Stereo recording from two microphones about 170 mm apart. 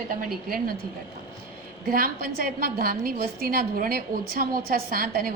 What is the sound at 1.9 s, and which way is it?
A woman's voice, 60° right (ahead or behind).